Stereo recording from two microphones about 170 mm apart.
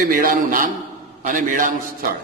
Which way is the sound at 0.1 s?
55° right (ahead or behind).